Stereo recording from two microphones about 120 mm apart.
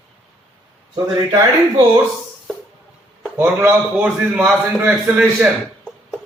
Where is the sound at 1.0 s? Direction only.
30° right (ahead or behind).